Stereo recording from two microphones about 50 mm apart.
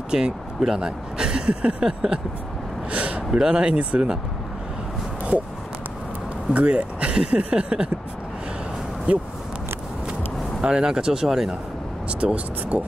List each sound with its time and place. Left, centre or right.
0.1 s speech: centre
2.9 s a sound: right
3.3 s speech: centre
6.5 s speech: right
9.1 s speech: right
10.6 s speech: centre
12.1 s speech: right